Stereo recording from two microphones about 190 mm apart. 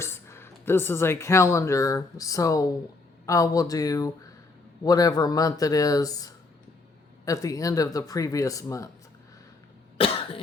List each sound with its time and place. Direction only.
0.0 s speech: 15° left (ahead or behind)